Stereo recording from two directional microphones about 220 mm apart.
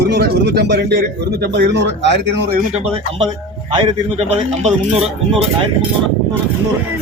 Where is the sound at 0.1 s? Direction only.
50° right (ahead or behind).